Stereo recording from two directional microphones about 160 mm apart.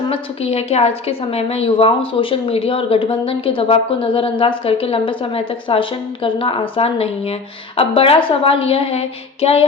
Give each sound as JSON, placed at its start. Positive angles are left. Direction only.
{"t": 0.1, "sound": "a woman's voice", "side_deg": 40}